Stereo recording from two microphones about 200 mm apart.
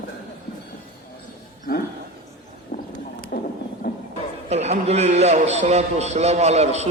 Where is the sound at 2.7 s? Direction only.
45° left (ahead or behind).